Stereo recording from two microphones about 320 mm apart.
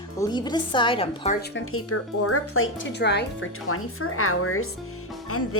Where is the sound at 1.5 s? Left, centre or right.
Left.